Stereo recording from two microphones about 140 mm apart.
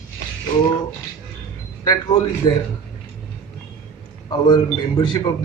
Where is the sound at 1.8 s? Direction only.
30° left (ahead or behind).